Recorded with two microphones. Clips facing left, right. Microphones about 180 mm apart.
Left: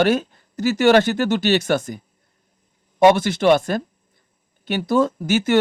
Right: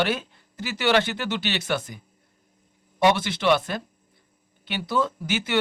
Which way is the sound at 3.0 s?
45° left (ahead or behind).